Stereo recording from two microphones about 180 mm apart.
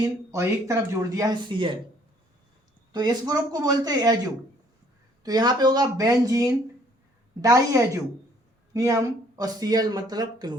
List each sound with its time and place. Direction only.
0.3 s speech: 15° right (ahead or behind)
2.9 s speech: 20° right (ahead or behind)
5.2 s speech: 20° right (ahead or behind)